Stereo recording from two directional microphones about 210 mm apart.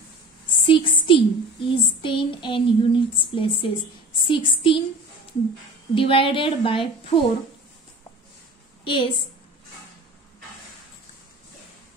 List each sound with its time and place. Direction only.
0.6 s speech: 25° left (ahead or behind)
5.9 s a woman's voice: 25° left (ahead or behind)
8.8 s a woman's voice: 25° left (ahead or behind)